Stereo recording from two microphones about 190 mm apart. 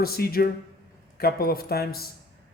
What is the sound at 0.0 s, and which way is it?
Speech, 50° left (ahead or behind).